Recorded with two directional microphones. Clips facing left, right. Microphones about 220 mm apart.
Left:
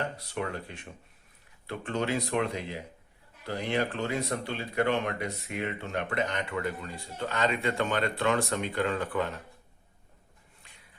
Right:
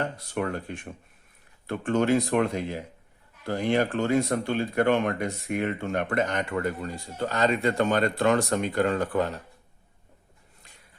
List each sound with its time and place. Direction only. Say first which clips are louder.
0.2 s speech: right 5 dB; 50° right (ahead or behind)